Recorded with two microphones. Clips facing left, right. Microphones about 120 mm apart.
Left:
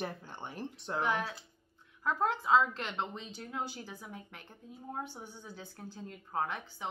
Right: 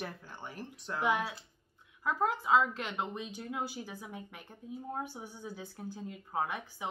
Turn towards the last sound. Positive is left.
turn(degrees=-10)  # may be behind; listen again after turning